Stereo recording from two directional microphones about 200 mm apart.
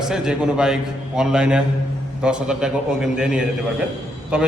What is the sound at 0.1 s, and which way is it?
A man's voice, 5° right (ahead or behind).